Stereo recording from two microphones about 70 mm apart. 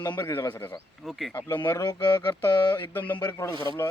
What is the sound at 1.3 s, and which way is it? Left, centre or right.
Speech, left.